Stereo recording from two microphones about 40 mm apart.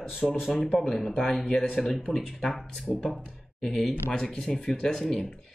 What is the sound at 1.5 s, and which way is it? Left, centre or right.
Speech, centre.